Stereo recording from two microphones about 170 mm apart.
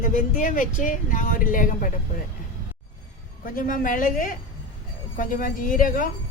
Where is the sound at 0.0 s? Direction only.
50° left (ahead or behind).